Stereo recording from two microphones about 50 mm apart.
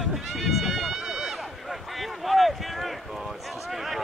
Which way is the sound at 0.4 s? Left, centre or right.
Centre.